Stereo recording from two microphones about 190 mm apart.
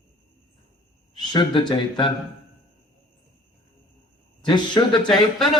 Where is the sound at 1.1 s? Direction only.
25° left (ahead or behind).